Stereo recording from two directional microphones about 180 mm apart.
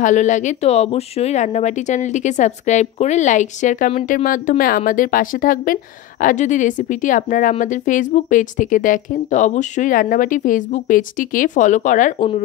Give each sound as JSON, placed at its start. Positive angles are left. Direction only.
{"t": 0.0, "sound": "a woman's voice", "side_deg": 45}